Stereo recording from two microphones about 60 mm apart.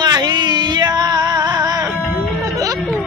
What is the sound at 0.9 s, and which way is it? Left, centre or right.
Music, right.